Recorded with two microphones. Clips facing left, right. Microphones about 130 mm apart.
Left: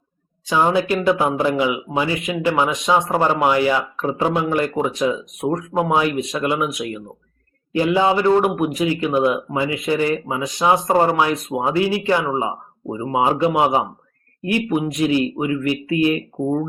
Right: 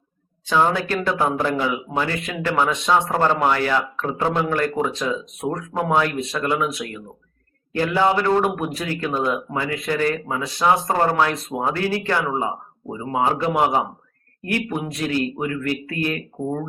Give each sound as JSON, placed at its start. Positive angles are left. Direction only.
{"t": 0.4, "sound": "speech", "side_deg": 15}